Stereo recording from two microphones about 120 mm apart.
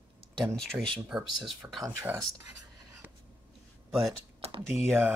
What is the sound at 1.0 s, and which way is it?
Speech, 5° right (ahead or behind).